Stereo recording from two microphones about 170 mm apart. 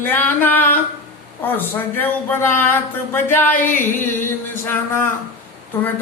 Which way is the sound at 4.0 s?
10° left (ahead or behind).